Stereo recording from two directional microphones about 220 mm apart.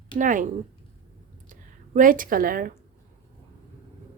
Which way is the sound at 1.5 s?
40° right (ahead or behind).